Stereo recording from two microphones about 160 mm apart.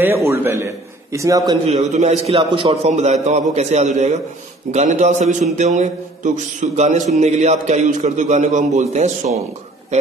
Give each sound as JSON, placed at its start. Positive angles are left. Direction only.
{"t": 0.0, "sound": "a man's voice", "side_deg": -15}
{"t": 1.7, "sound": "a man's voice", "side_deg": -45}